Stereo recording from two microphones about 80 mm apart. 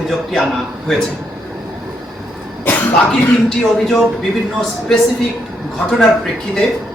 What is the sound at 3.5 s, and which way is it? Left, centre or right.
Speech, centre.